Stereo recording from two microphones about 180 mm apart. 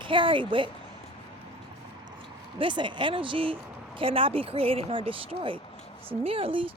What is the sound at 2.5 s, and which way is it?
Speech, 25° right (ahead or behind).